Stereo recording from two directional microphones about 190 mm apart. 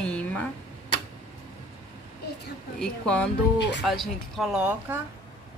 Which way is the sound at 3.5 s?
65° left (ahead or behind).